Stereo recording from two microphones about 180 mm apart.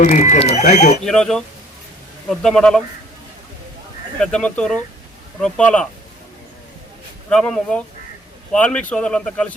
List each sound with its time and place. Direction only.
0.0 s speech: 40° left (ahead or behind)
1.0 s speech: 5° left (ahead or behind)
4.2 s speech: 5° left (ahead or behind)
7.3 s speech: 5° left (ahead or behind)